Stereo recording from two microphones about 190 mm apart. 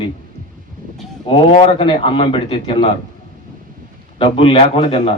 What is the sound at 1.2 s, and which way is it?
A man's voice, 25° left (ahead or behind).